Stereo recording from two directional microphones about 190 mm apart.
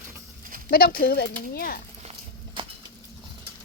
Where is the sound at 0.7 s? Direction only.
50° left (ahead or behind).